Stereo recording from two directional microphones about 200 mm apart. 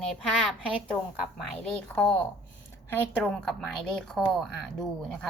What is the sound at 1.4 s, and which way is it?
Speech, 5° left (ahead or behind).